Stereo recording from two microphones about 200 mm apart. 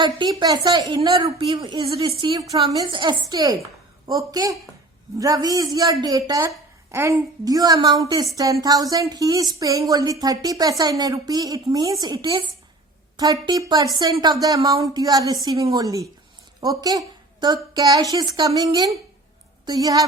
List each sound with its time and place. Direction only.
0.0 s a woman's voice: 20° right (ahead or behind)